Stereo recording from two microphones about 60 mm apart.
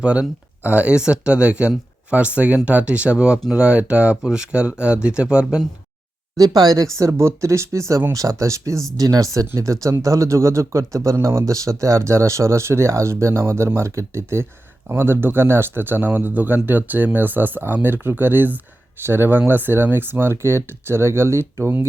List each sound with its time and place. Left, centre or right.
0.0 s speech: right
6.3 s speech: right
7.0 s speech: right
9.0 s speech: right